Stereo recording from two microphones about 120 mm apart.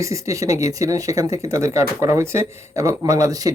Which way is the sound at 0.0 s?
25° right (ahead or behind).